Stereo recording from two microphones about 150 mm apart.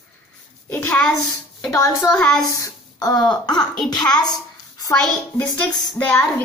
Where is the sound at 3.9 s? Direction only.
5° left (ahead or behind).